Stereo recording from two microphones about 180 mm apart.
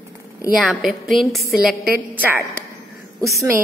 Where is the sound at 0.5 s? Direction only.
Centre (ahead or behind).